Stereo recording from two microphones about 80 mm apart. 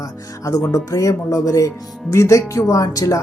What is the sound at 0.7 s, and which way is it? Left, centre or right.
Speech, left.